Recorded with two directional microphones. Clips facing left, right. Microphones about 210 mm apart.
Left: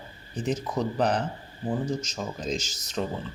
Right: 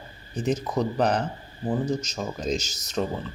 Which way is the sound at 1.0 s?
45° right (ahead or behind).